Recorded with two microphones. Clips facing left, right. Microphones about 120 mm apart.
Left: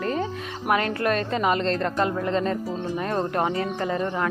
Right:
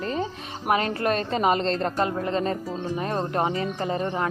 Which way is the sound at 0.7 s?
25° right (ahead or behind).